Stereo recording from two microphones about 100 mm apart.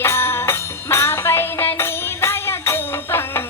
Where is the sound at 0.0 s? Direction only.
25° left (ahead or behind).